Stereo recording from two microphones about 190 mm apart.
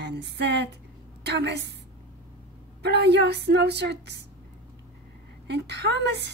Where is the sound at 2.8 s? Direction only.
65° right (ahead or behind).